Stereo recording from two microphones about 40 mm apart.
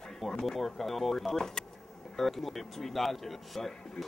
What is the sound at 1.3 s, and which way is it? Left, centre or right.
Speech, centre.